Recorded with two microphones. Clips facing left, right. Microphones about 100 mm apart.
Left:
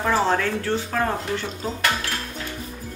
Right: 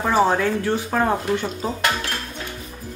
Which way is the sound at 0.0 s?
15° right (ahead or behind).